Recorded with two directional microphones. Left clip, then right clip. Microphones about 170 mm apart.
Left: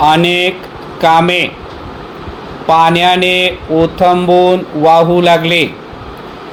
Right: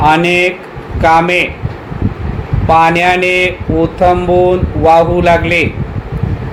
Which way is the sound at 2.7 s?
45° left (ahead or behind).